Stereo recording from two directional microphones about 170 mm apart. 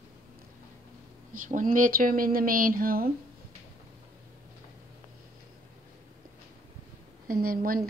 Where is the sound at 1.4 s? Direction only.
50° right (ahead or behind).